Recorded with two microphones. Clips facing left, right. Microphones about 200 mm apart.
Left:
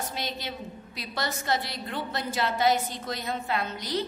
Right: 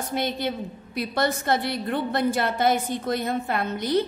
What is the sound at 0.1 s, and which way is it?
A woman's voice, 55° right (ahead or behind).